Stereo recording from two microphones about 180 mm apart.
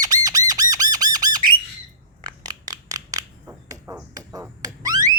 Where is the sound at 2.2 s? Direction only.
20° right (ahead or behind).